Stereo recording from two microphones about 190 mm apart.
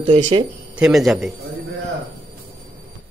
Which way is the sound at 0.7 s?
Centre (ahead or behind).